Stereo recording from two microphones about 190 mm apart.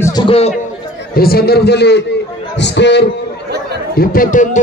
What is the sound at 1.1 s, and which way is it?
A man's voice, 55° left (ahead or behind).